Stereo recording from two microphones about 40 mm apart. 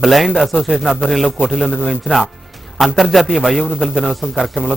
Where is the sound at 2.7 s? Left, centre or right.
Centre.